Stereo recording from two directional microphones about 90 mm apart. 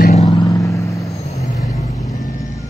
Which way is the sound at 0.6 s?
35° left (ahead or behind).